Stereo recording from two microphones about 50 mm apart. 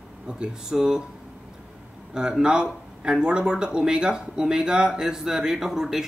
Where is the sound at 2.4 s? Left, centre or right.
Centre.